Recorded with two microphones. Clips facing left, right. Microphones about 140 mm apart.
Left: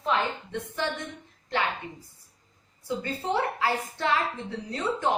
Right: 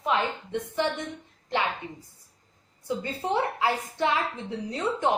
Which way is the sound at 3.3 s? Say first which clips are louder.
Right 1 dB; 20° right (ahead or behind).